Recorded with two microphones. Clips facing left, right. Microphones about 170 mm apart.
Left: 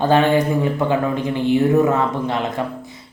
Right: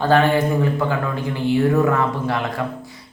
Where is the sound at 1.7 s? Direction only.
20° left (ahead or behind).